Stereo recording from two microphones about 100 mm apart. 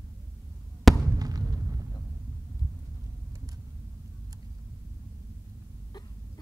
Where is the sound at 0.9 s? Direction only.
Centre (ahead or behind).